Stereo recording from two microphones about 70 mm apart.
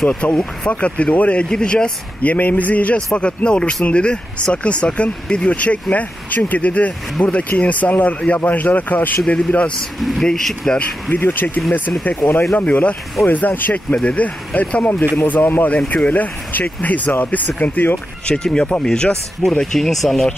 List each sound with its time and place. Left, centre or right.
0.0 s speech: centre
9.9 s speech: centre
11.1 s speech: left
12.5 s speech: left
18.2 s speech: centre